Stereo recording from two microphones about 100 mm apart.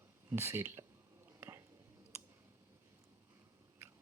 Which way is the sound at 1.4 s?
25° right (ahead or behind).